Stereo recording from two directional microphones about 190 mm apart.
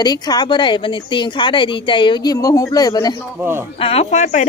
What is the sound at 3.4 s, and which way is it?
Speech, 10° right (ahead or behind).